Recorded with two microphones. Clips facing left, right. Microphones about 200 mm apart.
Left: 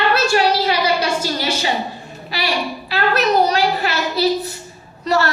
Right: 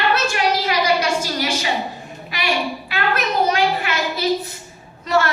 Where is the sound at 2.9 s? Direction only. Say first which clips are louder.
Left 7 dB; 40° left (ahead or behind).